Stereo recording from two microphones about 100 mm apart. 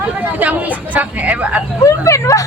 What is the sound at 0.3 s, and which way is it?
Speech, 15° right (ahead or behind).